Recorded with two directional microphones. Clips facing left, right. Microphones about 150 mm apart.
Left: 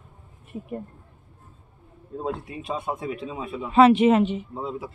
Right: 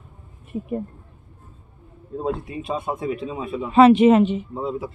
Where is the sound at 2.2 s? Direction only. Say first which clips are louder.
Right 4 dB; 40° right (ahead or behind).